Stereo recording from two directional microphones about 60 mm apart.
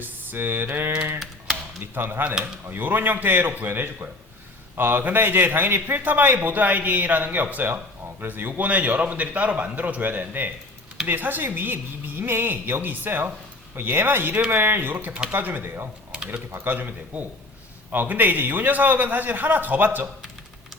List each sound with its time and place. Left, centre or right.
0.0 s a woman's voice: right
16.1 s a sound: centre
16.6 s a man's voice: right